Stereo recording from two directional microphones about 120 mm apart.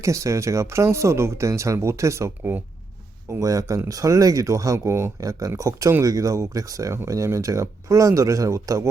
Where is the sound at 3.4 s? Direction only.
30° right (ahead or behind).